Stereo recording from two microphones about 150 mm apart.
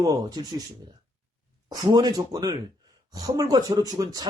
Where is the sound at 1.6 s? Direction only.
25° right (ahead or behind).